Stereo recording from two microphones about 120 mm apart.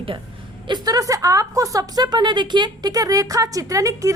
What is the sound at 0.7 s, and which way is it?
A woman's voice, 30° right (ahead or behind).